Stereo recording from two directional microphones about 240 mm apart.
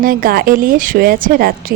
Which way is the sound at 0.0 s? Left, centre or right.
Right.